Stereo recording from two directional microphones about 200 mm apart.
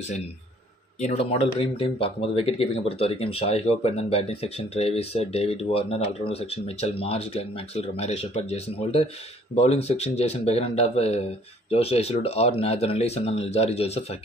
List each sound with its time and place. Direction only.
1.0 s speech: 30° left (ahead or behind)